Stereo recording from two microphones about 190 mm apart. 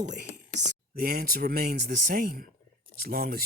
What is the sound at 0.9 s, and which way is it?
Speech, 50° right (ahead or behind).